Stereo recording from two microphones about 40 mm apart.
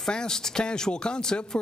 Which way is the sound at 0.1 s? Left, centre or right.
Centre.